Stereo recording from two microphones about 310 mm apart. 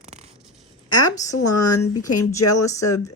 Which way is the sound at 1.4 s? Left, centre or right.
Left.